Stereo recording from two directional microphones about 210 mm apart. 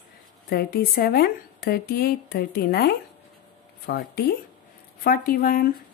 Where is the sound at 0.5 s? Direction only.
50° left (ahead or behind).